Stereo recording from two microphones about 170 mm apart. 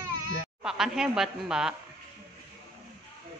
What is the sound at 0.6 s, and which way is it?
A woman's voice, 5° right (ahead or behind).